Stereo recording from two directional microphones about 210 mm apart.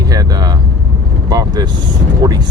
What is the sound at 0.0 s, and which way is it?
Vehicle, 20° right (ahead or behind).